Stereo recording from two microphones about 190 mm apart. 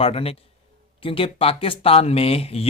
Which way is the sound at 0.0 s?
30° left (ahead or behind).